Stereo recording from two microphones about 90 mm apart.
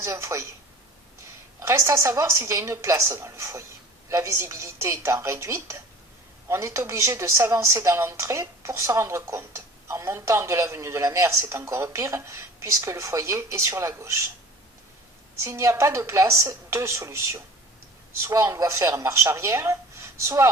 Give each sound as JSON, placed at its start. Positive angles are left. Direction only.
{"t": 0.0, "sound": "speech", "side_deg": -35}
{"t": 1.5, "sound": "speech", "side_deg": -35}
{"t": 15.4, "sound": "speech", "side_deg": -35}